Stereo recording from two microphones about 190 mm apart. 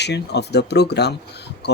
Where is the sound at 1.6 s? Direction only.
60° left (ahead or behind).